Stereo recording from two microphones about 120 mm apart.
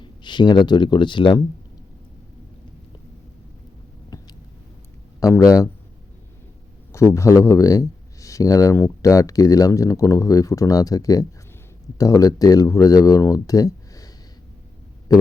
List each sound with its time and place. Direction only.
0.0 s speech: 40° left (ahead or behind)
4.1 s a sound: 30° left (ahead or behind)
5.2 s speech: 30° left (ahead or behind)
6.9 s speech: 25° left (ahead or behind)